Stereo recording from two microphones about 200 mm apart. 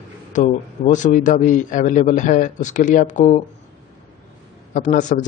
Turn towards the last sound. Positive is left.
turn(degrees=40)  # may be behind; listen again after turning